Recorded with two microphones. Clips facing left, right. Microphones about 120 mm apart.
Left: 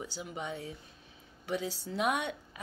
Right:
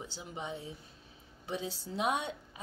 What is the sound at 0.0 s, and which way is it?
Speech, 25° right (ahead or behind).